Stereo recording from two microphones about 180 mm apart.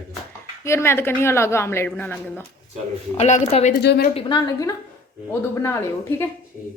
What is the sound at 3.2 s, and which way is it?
Speech, 40° left (ahead or behind).